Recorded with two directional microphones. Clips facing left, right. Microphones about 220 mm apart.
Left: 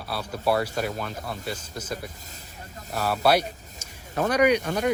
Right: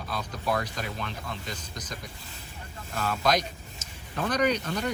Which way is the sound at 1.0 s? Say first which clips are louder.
Left 3 dB; 40° left (ahead or behind).